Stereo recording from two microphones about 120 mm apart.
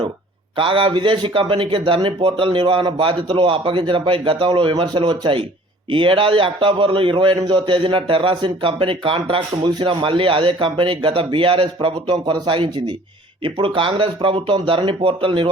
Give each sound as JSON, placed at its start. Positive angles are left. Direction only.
{"t": 0.5, "sound": "a man's voice", "side_deg": -45}